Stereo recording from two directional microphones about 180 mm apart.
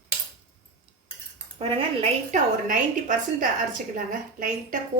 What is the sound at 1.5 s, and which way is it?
Speech, 35° right (ahead or behind).